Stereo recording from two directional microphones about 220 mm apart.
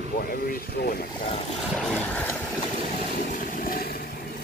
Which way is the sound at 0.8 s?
45° left (ahead or behind).